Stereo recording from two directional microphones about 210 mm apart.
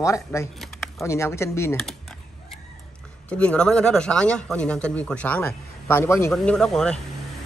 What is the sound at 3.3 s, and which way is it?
A man's voice, 5° left (ahead or behind).